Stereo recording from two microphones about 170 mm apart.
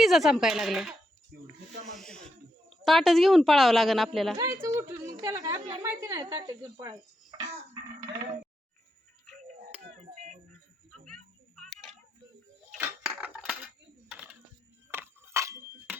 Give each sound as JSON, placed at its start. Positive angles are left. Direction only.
{"t": 0.0, "sound": "a woman's voice", "side_deg": 0}
{"t": 1.3, "sound": "speech", "side_deg": -60}
{"t": 1.9, "sound": "a woman's voice", "side_deg": 5}
{"t": 4.6, "sound": "speech", "side_deg": -20}
{"t": 11.0, "sound": "tick-tock", "side_deg": 5}
{"t": 12.8, "sound": "cutlery", "side_deg": -10}
{"t": 14.1, "sound": "coin", "side_deg": -5}
{"t": 14.8, "sound": "a sound", "side_deg": -15}